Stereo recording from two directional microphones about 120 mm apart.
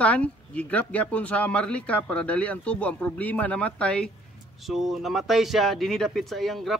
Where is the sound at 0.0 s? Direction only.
10° left (ahead or behind).